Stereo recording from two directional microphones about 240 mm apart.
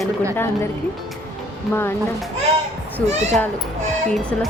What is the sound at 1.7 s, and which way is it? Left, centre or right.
Speech, centre.